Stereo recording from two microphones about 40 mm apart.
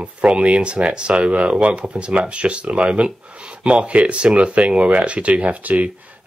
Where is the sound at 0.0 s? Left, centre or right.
Right.